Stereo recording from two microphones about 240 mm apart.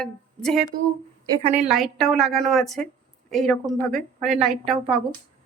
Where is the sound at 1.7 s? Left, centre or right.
Centre.